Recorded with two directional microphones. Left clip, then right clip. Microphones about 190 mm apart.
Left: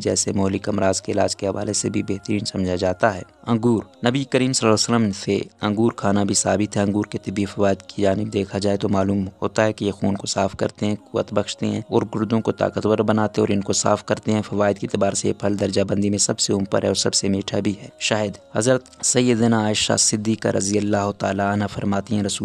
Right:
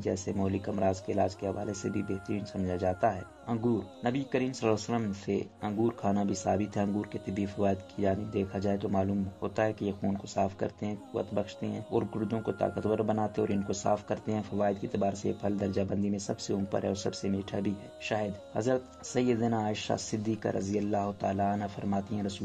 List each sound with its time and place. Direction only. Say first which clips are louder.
0.0 s speech: left 11 dB; 45° left (ahead or behind)